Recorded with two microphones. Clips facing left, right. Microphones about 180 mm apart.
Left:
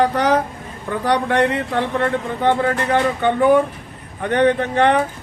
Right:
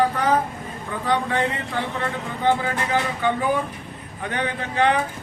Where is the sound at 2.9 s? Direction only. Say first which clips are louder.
Left 4 dB; 65° left (ahead or behind).